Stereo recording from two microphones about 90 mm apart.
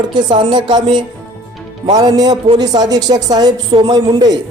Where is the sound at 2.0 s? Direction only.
45° right (ahead or behind).